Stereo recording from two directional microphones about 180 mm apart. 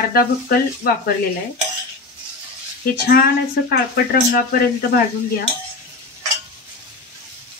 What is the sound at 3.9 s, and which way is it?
Speech, 60° left (ahead or behind).